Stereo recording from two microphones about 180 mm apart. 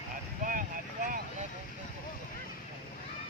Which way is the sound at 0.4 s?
50° right (ahead or behind).